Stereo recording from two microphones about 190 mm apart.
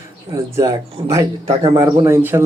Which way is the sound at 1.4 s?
35° right (ahead or behind).